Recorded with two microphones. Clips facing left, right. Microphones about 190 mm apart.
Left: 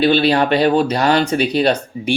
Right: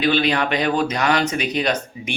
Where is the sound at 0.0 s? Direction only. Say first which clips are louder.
Left 5 dB; 35° left (ahead or behind).